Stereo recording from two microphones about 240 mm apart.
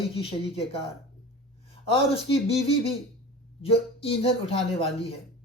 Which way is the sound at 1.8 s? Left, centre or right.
Left.